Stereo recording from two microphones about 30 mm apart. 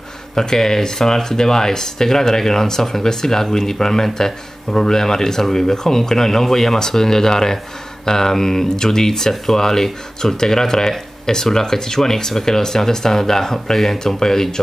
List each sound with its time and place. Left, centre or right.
0.4 s speech: centre